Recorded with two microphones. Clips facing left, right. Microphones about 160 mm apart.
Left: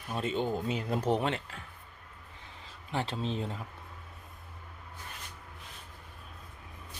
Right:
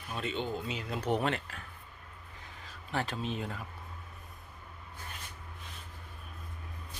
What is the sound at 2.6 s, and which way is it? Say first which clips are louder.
Speech: left 1 dB; 25° left (ahead or behind).